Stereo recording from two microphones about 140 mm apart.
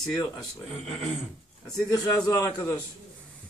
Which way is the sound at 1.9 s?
25° left (ahead or behind).